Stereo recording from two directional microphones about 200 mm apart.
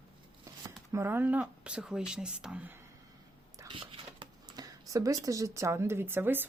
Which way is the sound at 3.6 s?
25° right (ahead or behind).